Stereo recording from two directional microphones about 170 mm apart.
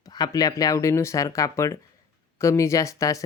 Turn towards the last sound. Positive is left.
turn(degrees=20)  # may be behind; listen again after turning